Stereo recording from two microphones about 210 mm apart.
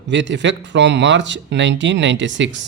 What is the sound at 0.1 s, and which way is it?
Speech, 55° right (ahead or behind).